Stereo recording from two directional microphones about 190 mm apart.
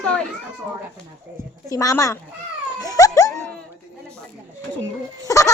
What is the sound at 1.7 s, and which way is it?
Speech, 20° left (ahead or behind).